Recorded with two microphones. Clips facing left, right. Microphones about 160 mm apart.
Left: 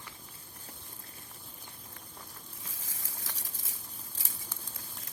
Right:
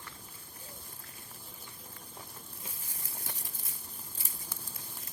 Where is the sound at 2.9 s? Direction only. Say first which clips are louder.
Even; 90° left.